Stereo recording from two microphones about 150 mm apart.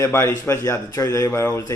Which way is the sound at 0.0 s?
20° left (ahead or behind).